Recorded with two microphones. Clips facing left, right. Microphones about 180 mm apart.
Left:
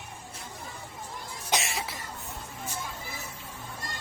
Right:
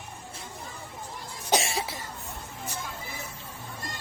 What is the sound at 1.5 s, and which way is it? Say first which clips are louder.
Cough: right 4 dB; 30° right (ahead or behind).